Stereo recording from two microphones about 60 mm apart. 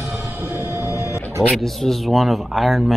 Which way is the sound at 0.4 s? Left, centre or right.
Right.